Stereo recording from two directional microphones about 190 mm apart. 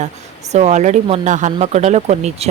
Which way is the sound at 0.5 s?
35° right (ahead or behind).